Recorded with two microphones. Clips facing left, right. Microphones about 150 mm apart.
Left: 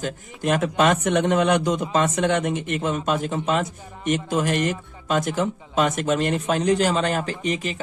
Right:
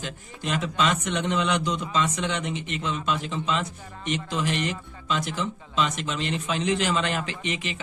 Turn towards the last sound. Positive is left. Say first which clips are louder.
# left 5 dB
turn(degrees=40)  # may be behind; listen again after turning